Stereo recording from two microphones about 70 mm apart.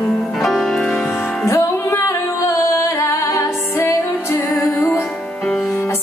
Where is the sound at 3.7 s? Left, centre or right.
Left.